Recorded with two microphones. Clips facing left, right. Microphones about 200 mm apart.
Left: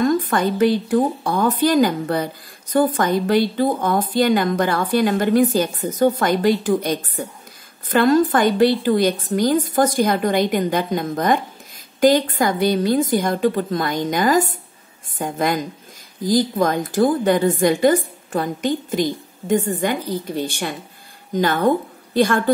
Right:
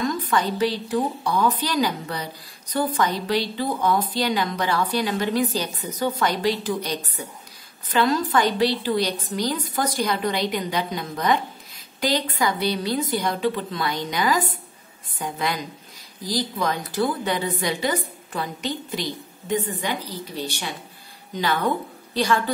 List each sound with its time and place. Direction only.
0.0 s a woman's voice: 50° left (ahead or behind)